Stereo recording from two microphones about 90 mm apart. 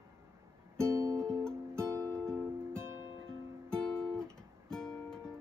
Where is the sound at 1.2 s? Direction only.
10° left (ahead or behind).